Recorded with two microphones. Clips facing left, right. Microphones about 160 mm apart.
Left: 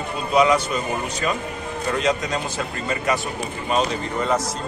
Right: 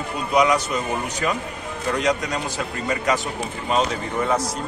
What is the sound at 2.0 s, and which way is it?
Speech, 15° right (ahead or behind).